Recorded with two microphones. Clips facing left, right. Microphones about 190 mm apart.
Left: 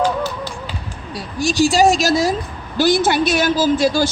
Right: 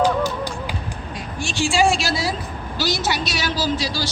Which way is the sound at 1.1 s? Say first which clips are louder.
Left 10 dB; 40° left (ahead or behind).